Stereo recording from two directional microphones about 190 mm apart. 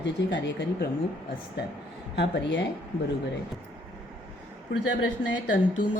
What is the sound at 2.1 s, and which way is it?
Speech, 65° left (ahead or behind).